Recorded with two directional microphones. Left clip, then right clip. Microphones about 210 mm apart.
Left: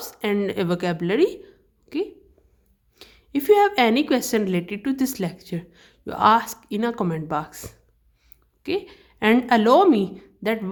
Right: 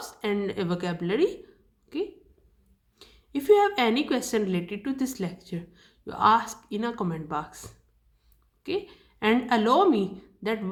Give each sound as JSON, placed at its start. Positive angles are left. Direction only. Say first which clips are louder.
{"t": 0.0, "sound": "a woman's voice", "louder": "left 5 dB", "side_deg": 40}